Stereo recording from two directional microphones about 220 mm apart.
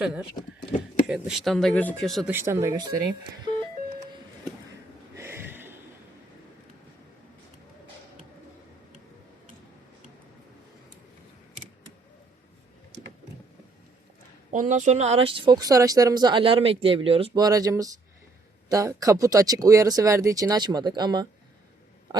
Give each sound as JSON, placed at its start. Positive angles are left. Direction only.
{"t": 0.0, "sound": "speech", "side_deg": -5}
{"t": 2.3, "sound": "speech", "side_deg": -10}
{"t": 5.1, "sound": "a sound", "side_deg": -10}
{"t": 14.5, "sound": "speech", "side_deg": -35}